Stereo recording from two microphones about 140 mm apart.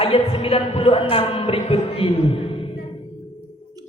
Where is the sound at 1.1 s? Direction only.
45° left (ahead or behind).